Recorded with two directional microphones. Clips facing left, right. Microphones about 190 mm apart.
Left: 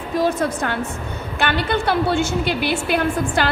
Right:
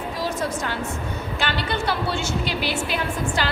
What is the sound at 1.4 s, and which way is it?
A woman's voice, 55° left (ahead or behind).